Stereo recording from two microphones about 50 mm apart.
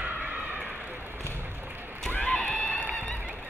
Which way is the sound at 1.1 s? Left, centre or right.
Right.